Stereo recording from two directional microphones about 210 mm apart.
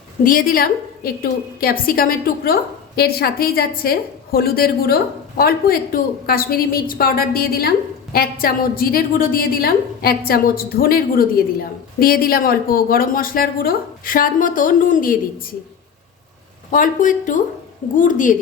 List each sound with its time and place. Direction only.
0.3 s a woman's voice: 45° left (ahead or behind)
16.7 s speech: 40° left (ahead or behind)